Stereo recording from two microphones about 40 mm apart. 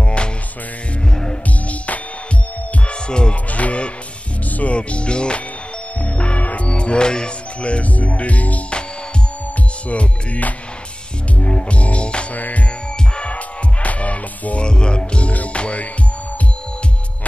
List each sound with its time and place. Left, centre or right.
0.0 s music: left
2.9 s music: left
3.4 s music: left
4.7 s music: left
6.7 s music: left
9.8 s music: left
12.4 s music: left
13.1 s music: left
14.6 s music: left